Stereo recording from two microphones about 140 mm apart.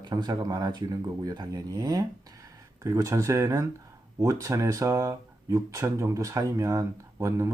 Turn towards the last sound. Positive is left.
turn(degrees=-25)  # may be behind; listen again after turning